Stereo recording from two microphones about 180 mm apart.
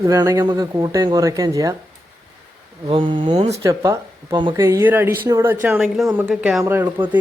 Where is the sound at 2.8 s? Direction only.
30° right (ahead or behind).